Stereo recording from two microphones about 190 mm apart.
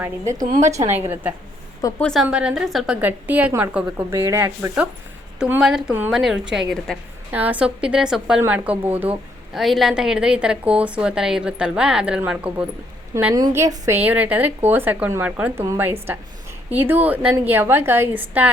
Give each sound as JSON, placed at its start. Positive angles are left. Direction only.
{"t": 0.0, "sound": "a woman's voice", "side_deg": -15}
{"t": 2.0, "sound": "a woman's voice", "side_deg": 5}